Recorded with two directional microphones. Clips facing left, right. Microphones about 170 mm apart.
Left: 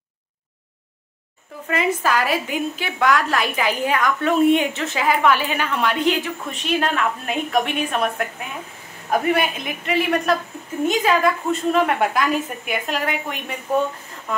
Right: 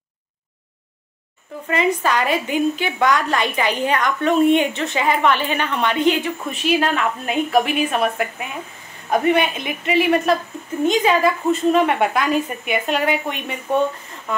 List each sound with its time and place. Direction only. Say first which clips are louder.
1.7 s a woman's voice: right 1 dB; 5° left (ahead or behind)